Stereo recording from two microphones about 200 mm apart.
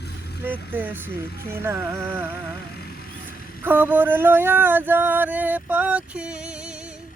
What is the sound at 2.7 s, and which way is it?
Vehicle, 50° left (ahead or behind).